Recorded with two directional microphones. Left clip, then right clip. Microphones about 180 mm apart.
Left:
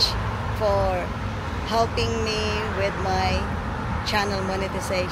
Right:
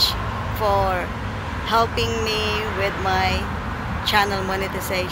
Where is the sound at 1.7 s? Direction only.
Centre (ahead or behind).